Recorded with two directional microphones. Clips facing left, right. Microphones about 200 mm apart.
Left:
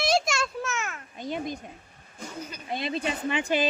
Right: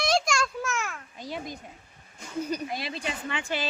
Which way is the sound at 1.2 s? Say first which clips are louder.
Left 5 dB; 20° left (ahead or behind).